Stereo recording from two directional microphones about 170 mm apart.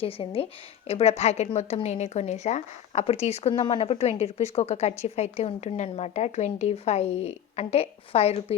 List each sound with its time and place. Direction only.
0.0 s a woman's voice: 35° left (ahead or behind)